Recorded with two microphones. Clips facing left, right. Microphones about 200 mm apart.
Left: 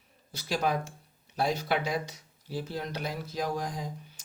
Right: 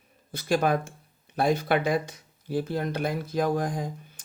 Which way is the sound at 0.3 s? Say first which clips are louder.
Right 6 dB; 55° right (ahead or behind).